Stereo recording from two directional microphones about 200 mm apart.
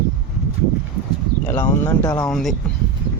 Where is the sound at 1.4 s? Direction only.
15° left (ahead or behind).